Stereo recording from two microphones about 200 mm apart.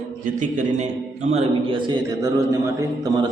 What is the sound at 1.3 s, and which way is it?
A man's voice, 30° right (ahead or behind).